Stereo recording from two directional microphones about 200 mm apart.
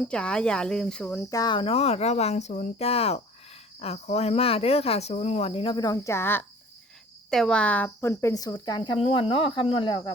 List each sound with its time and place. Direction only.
0.1 s speech: 5° left (ahead or behind)
1.3 s speech: 20° left (ahead or behind)